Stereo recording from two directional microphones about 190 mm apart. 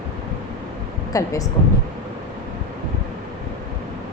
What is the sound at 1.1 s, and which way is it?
Speech, 20° left (ahead or behind).